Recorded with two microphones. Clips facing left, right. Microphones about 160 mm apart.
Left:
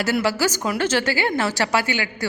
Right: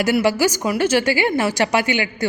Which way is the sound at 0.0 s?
15° right (ahead or behind).